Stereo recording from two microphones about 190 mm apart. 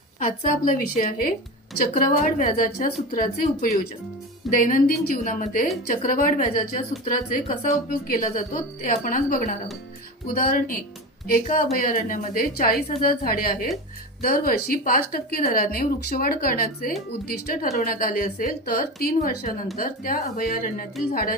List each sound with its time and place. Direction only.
0.2 s speech: 50° left (ahead or behind)